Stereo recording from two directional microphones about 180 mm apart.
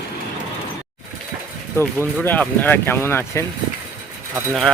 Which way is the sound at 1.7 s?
10° left (ahead or behind).